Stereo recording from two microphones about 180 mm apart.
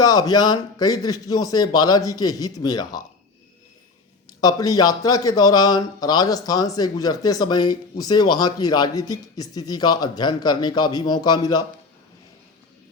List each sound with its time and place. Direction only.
0.0 s speech: 20° left (ahead or behind)
4.4 s speech: 20° left (ahead or behind)